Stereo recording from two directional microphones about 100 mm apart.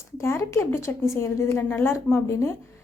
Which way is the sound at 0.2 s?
30° left (ahead or behind).